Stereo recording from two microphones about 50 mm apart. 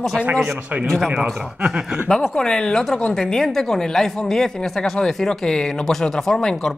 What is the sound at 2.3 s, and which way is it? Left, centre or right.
Speech, centre.